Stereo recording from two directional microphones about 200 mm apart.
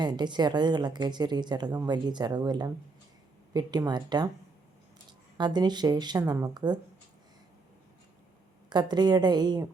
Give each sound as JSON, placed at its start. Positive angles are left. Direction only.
{"t": 0.0, "sound": "speech", "side_deg": -20}
{"t": 5.4, "sound": "speech", "side_deg": -20}
{"t": 8.7, "sound": "speech", "side_deg": -20}